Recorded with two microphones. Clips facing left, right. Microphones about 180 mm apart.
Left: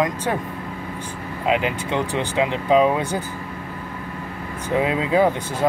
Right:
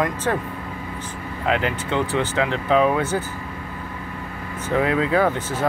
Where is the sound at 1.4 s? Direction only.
15° left (ahead or behind).